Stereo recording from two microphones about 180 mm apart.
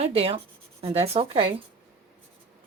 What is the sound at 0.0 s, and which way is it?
Speech, 35° right (ahead or behind).